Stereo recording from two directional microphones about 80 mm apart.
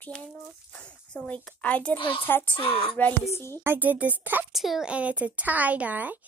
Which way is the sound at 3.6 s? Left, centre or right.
Right.